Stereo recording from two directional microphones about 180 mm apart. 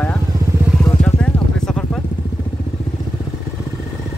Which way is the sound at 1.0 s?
5° left (ahead or behind).